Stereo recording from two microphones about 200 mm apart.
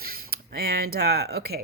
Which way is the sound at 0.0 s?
50° right (ahead or behind).